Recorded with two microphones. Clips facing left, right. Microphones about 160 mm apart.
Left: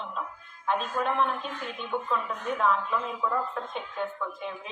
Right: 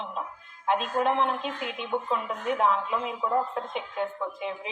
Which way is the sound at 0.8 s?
25° right (ahead or behind).